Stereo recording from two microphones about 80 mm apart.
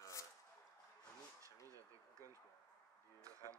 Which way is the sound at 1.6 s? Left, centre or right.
Right.